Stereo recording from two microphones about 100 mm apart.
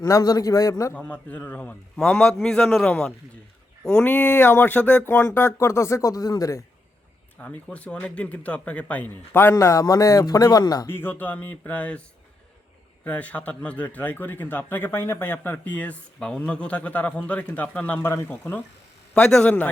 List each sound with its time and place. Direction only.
0.0 s a man's voice: 40° left (ahead or behind)
0.9 s a man's voice: 15° left (ahead or behind); by 6.6 s 35° left (ahead or behind)
7.3 s speech: 15° left (ahead or behind); by 10.8 s 40° left (ahead or behind)
10.8 s a man's voice: 20° left (ahead or behind)
13.1 s a man's voice: 15° left (ahead or behind)
18.0 s a man's voice: 25° left (ahead or behind)